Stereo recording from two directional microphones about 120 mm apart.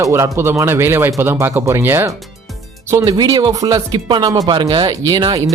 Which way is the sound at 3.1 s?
35° right (ahead or behind).